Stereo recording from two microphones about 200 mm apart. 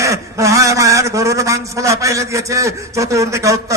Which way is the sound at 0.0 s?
15° right (ahead or behind).